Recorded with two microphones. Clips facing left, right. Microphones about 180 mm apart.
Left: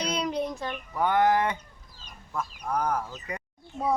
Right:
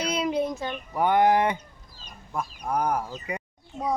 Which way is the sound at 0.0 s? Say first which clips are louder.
Right 3 dB; 5° right (ahead or behind).